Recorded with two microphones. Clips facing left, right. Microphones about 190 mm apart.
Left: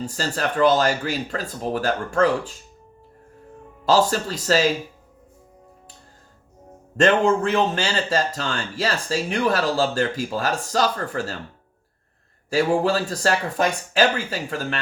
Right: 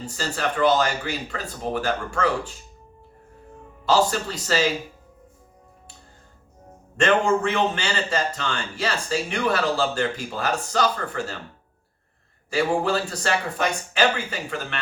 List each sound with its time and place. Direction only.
0.2 s speech: 40° left (ahead or behind)
4.1 s speech: 40° left (ahead or behind)
6.9 s speech: 40° left (ahead or behind)
12.5 s speech: 40° left (ahead or behind)